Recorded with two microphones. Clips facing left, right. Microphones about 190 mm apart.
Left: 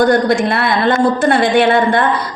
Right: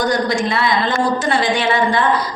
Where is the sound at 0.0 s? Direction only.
60° left (ahead or behind).